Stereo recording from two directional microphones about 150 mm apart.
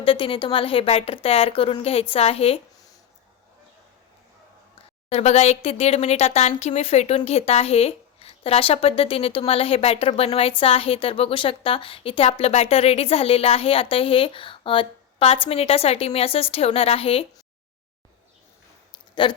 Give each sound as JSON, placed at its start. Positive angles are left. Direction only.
{"t": 0.0, "sound": "speech", "side_deg": 35}
{"t": 5.0, "sound": "speech", "side_deg": 45}
{"t": 19.2, "sound": "speech", "side_deg": 30}